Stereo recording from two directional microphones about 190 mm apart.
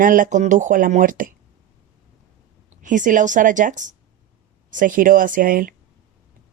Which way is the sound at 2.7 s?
45° right (ahead or behind).